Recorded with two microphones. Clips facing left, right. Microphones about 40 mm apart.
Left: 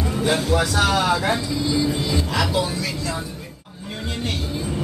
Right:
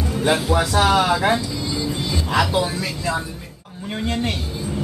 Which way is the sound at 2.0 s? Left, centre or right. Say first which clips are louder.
Right 2 dB; centre.